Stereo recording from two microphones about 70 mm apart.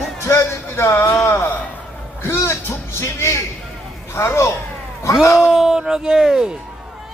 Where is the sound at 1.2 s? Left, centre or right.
Left.